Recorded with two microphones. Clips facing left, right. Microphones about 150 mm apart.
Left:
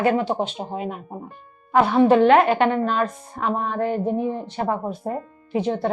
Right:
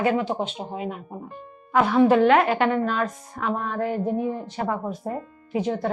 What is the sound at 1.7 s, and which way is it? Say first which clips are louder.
A woman's voice: left 2 dB; 30° left (ahead or behind).